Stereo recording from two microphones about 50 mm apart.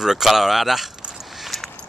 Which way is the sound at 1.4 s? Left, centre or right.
Centre.